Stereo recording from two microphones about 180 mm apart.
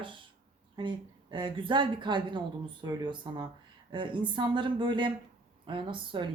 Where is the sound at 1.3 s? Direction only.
25° right (ahead or behind).